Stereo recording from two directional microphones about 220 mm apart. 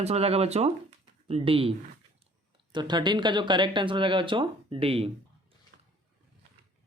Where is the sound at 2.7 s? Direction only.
20° right (ahead or behind).